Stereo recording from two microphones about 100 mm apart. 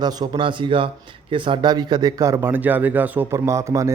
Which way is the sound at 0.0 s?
40° right (ahead or behind).